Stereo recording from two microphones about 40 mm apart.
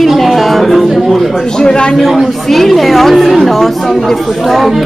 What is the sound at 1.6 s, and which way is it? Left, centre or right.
Speech, left.